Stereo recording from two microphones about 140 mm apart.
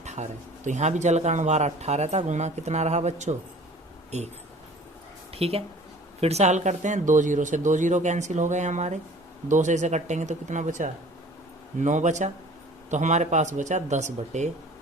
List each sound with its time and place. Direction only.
0.0 s speech: 55° right (ahead or behind)
5.3 s a woman's voice: 45° right (ahead or behind)